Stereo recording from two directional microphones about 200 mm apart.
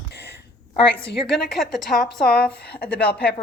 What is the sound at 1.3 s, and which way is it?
Speech, centre (ahead or behind).